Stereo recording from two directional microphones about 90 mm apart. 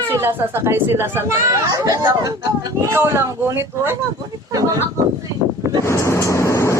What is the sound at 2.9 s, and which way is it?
Speech, 30° right (ahead or behind).